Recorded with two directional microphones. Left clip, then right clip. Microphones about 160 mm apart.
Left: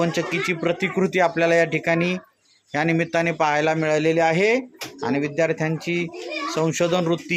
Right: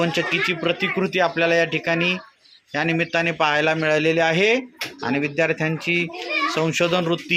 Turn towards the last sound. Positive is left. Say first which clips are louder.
# right 1 dB
turn(degrees=15)  # may be behind; listen again after turning